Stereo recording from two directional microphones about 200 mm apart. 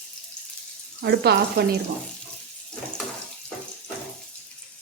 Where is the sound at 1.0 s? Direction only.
55° right (ahead or behind).